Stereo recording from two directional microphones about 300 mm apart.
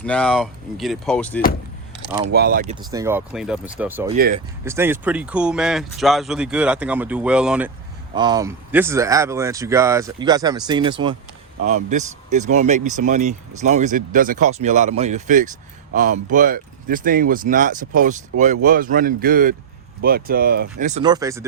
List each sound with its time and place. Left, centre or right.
0.0 s speech: centre
2.3 s speech: right
2.7 s speech: centre
8.1 s speech: centre